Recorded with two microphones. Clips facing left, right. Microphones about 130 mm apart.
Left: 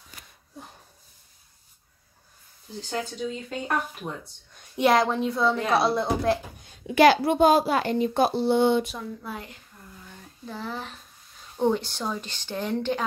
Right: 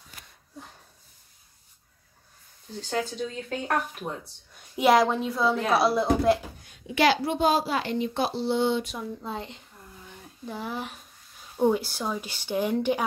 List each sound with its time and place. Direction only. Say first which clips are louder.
2.9 s speech: right 1 dB; centre (ahead or behind)
4.7 s speech: right 1 dB; centre (ahead or behind)
7.0 s a child's voice: left 5 dB; 50° left (ahead or behind)
9.2 s speech: right 2 dB; 25° right (ahead or behind)
10.0 s a sound: right 2 dB; 15° right (ahead or behind)
11.5 s a woman's voice: right 1 dB; 10° right (ahead or behind)